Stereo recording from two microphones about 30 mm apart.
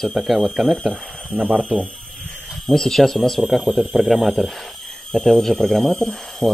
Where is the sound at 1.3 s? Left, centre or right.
Right.